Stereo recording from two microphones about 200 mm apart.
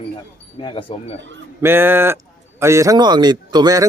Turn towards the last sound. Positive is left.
turn(degrees=-20)  # may be behind; listen again after turning